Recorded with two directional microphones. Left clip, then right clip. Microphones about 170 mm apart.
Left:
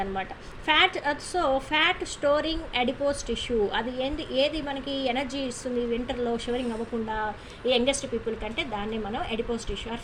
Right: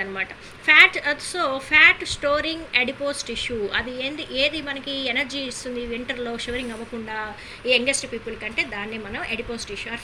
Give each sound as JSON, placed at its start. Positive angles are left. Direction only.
{"t": 0.0, "sound": "a woman's voice", "side_deg": 45}
{"t": 7.6, "sound": "a woman's voice", "side_deg": 45}